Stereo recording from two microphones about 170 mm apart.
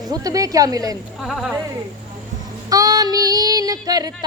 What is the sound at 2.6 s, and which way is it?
Music, 20° right (ahead or behind).